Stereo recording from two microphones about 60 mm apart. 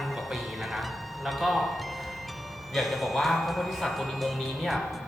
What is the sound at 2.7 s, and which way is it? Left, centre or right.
Speech, centre.